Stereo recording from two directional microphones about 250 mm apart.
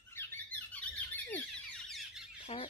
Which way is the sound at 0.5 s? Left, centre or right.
Centre.